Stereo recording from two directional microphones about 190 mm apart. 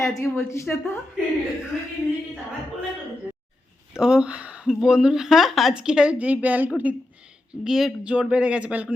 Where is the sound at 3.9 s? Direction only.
5° right (ahead or behind).